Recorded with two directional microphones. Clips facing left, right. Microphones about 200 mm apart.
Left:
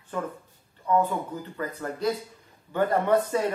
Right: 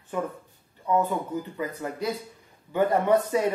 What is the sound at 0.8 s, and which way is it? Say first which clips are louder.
Speech: even; 15° right (ahead or behind).